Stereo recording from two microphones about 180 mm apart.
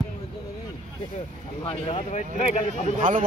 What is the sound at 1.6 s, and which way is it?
Speech, 30° left (ahead or behind).